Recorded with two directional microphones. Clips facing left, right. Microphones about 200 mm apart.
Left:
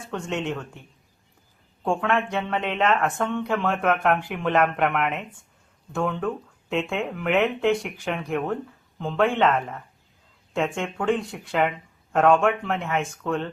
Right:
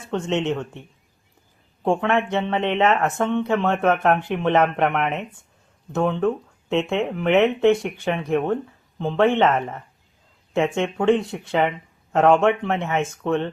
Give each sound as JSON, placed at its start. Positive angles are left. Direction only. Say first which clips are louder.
{"t": 0.1, "sound": "speech", "louder": "right 6 dB", "side_deg": -25}
{"t": 1.8, "sound": "speech", "louder": "right 3 dB", "side_deg": -25}